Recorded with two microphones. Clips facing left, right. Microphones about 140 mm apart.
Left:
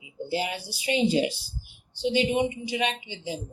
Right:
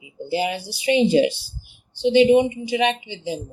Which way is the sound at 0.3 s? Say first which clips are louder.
Right 6 dB; 90° right.